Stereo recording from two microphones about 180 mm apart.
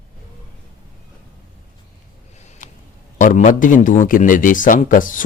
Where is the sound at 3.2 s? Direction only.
45° left (ahead or behind).